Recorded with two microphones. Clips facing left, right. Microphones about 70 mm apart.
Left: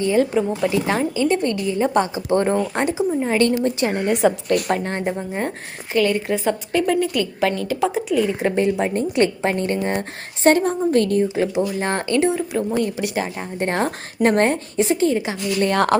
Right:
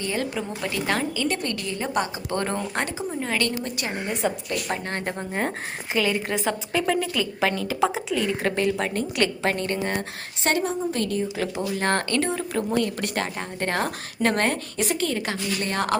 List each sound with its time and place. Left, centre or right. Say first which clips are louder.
0.0 s a woman's voice: left 10 dB; left
4.4 s a woman's voice: left 9 dB; left
4.8 s a woman's voice: left 5 dB; left
5.1 s a woman's voice: left 2 dB; centre; by 11.3 s left
11.3 s speech: left 6 dB; centre
13.7 s a woman's voice: left 4 dB; left
15.6 s a woman's voice: left 10 dB; left